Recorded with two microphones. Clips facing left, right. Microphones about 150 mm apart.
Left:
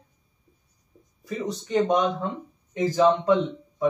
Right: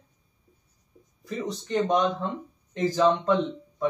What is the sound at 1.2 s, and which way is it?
Speech, 10° left (ahead or behind).